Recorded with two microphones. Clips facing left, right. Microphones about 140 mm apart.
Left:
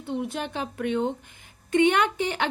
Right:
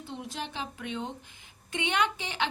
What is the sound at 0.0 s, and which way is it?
A woman's voice, 60° left (ahead or behind).